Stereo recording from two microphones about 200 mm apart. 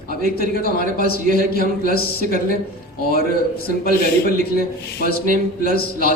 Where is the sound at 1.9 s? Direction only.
50° left (ahead or behind).